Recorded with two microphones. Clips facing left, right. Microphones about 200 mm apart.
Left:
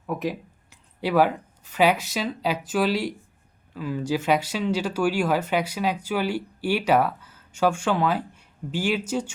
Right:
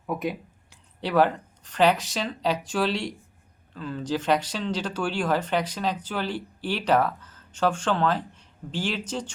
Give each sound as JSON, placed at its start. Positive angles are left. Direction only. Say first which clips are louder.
{"t": 0.1, "sound": "speech", "louder": "left 1 dB", "side_deg": 0}